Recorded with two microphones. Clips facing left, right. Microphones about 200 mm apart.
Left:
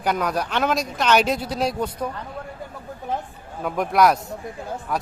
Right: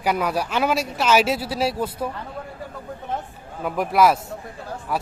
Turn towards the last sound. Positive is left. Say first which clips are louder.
# even
turn(degrees=-5)  # may be behind; listen again after turning